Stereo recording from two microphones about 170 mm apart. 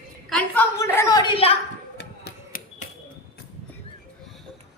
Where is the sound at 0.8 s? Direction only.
15° left (ahead or behind).